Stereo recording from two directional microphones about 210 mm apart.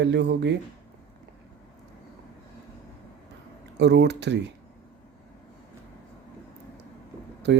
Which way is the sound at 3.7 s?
55° right (ahead or behind).